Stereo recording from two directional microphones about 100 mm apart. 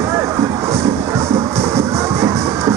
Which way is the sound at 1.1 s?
30° right (ahead or behind).